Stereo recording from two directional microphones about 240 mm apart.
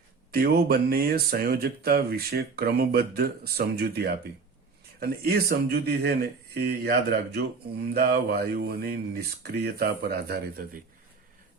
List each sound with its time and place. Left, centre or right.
0.3 s speech: right